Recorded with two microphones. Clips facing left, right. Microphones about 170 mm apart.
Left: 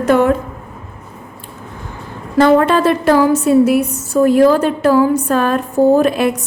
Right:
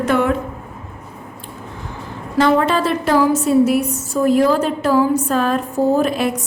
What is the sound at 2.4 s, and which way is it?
A woman's voice, 55° left (ahead or behind).